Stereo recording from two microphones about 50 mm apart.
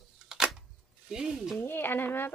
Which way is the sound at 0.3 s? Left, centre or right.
Centre.